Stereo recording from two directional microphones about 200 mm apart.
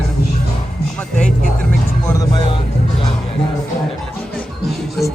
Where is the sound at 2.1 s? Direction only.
20° left (ahead or behind).